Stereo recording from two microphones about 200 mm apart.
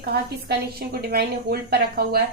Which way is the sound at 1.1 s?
50° right (ahead or behind).